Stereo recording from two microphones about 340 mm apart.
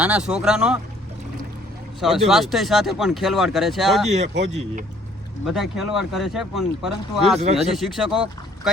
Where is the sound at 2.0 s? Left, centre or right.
Centre.